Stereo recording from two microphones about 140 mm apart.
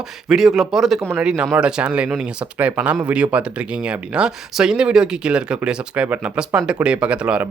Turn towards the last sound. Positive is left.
turn(degrees=-5)  # may be behind; listen again after turning